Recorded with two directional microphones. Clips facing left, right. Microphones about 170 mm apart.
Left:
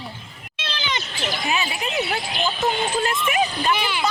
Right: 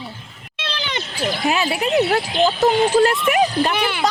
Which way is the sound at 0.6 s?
60° right (ahead or behind).